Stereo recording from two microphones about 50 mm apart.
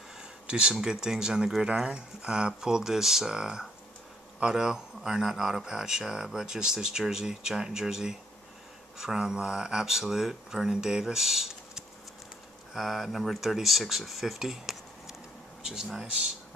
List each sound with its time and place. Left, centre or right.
0.2 s speech: centre